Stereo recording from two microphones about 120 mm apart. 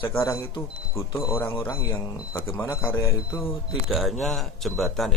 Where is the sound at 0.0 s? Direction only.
20° left (ahead or behind).